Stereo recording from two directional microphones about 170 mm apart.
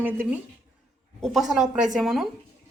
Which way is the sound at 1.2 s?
Centre (ahead or behind).